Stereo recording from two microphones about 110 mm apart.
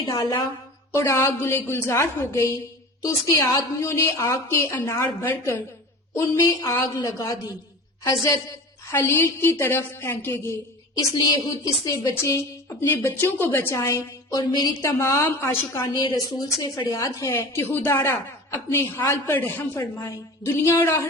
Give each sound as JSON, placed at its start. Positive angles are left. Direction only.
{"t": 0.1, "sound": "a woman's voice", "side_deg": 40}
{"t": 0.9, "sound": "a woman's voice", "side_deg": 25}
{"t": 8.9, "sound": "a woman's voice", "side_deg": 20}
{"t": 10.9, "sound": "a woman's voice", "side_deg": 35}
{"t": 14.3, "sound": "a woman's voice", "side_deg": 40}